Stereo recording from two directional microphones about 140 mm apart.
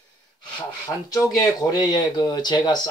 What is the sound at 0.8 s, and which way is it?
Speech, 25° left (ahead or behind).